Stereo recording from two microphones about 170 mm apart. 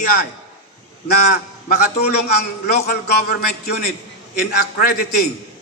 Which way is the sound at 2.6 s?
70° left (ahead or behind).